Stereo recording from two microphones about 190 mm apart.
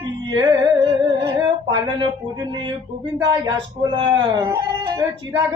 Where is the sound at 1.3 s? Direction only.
25° right (ahead or behind).